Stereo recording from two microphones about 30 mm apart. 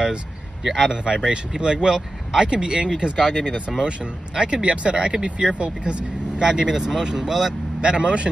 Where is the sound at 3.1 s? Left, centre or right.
Centre.